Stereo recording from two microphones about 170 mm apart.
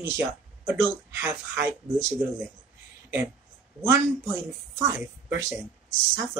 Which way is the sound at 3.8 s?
15° right (ahead or behind).